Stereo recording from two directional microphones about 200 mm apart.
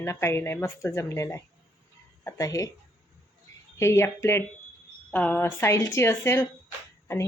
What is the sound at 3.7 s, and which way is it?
Speech, 15° left (ahead or behind).